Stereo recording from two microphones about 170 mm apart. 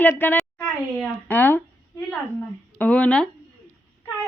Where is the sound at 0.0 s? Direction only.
10° left (ahead or behind).